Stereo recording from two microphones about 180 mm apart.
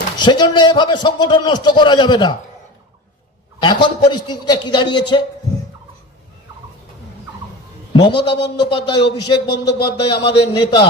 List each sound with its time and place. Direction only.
0.2 s a man's voice: 25° left (ahead or behind)
3.6 s a man's voice: 25° left (ahead or behind)
7.9 s a man's voice: 25° left (ahead or behind)